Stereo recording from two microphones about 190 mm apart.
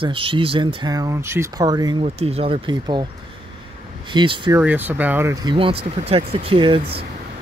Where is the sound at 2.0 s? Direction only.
35° right (ahead or behind).